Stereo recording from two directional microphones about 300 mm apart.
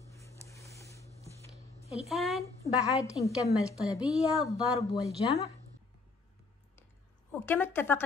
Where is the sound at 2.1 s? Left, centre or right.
Centre.